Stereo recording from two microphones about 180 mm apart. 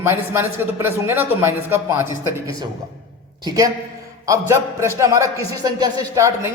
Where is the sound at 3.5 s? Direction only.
20° right (ahead or behind).